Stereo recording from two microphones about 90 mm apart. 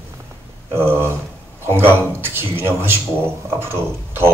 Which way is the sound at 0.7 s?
25° right (ahead or behind).